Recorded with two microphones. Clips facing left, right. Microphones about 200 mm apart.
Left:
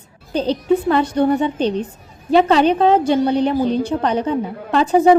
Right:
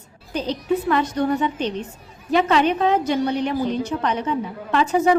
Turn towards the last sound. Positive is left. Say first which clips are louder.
# left 5 dB
turn(degrees=30)  # may be behind; listen again after turning